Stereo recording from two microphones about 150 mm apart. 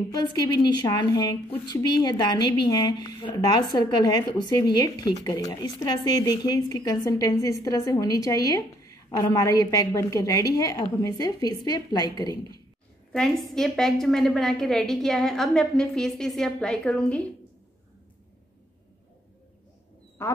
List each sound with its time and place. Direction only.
0.1 s speech: 30° left (ahead or behind)
13.1 s a woman's voice: centre (ahead or behind)
20.2 s speech: 15° left (ahead or behind)